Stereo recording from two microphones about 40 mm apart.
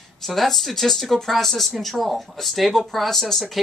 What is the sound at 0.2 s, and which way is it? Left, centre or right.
Speech, centre.